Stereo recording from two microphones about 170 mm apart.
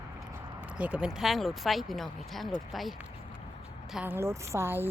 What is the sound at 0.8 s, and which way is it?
Speech, 5° right (ahead or behind).